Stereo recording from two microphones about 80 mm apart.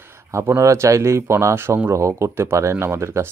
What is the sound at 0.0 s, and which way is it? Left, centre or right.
Speech, right.